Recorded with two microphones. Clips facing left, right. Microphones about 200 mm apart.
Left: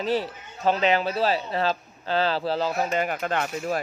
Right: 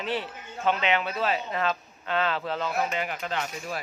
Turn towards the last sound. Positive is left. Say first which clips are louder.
# left 6 dB
turn(degrees=50)  # may be behind; listen again after turning